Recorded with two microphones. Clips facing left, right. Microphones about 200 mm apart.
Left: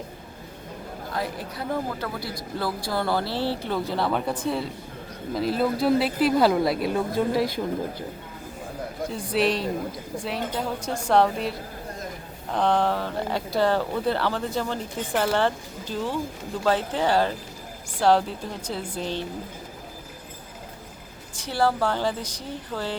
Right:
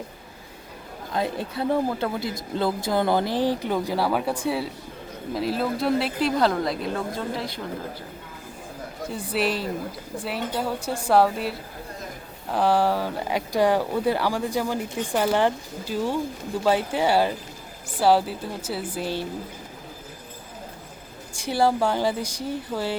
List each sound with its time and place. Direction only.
1.1 s speech: 25° right (ahead or behind); by 7.4 s 15° left (ahead or behind)
9.1 s speech: centre (ahead or behind)
21.3 s speech: 10° right (ahead or behind)